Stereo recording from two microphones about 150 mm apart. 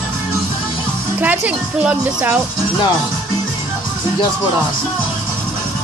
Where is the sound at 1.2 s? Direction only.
10° right (ahead or behind).